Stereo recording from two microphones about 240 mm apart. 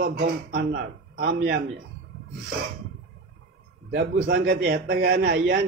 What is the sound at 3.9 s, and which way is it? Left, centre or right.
A man's voice, right.